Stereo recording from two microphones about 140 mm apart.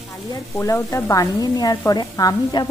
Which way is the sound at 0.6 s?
20° left (ahead or behind).